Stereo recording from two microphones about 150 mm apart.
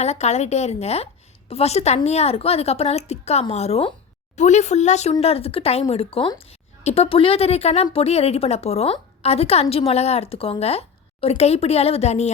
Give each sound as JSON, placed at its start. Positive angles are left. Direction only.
{"t": 0.0, "sound": "a woman's voice", "side_deg": 45}